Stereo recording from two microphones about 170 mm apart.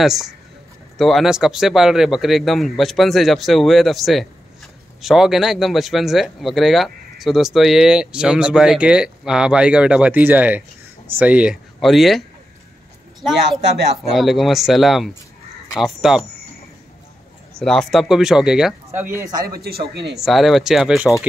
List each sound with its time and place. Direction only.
0.0 s speech: centre (ahead or behind)
14.1 s speech: centre (ahead or behind)
17.6 s speech: 5° left (ahead or behind)
18.9 s speech: 15° right (ahead or behind)
19.9 s speech: 85° right
20.2 s speech: centre (ahead or behind)